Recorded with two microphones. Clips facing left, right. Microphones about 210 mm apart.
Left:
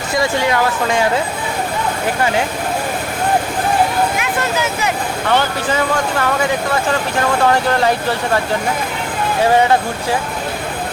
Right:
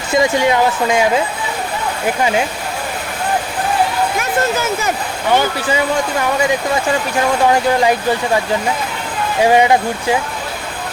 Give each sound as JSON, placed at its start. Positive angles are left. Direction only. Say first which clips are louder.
{"t": 0.1, "sound": "speech", "louder": "right 3 dB", "side_deg": -20}
{"t": 5.3, "sound": "speech", "louder": "right 2 dB", "side_deg": -10}
{"t": 7.4, "sound": "speech", "louder": "right 2 dB", "side_deg": -10}
{"t": 9.4, "sound": "speech", "louder": "right 2 dB", "side_deg": -15}